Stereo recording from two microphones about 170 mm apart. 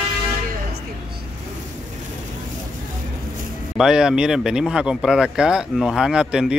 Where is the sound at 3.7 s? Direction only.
5° right (ahead or behind).